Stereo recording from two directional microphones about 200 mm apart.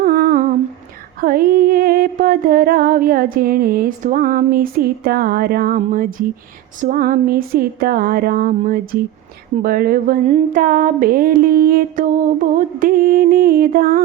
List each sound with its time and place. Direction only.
0.0 s humming: 50° right (ahead or behind)
1.2 s music: 45° right (ahead or behind)
6.7 s a sound: 45° right (ahead or behind)